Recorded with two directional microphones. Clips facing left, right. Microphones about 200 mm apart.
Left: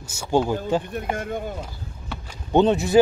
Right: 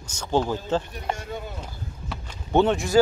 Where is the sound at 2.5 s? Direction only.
20° left (ahead or behind).